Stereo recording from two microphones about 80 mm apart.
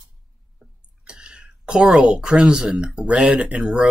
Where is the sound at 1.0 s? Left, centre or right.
Centre.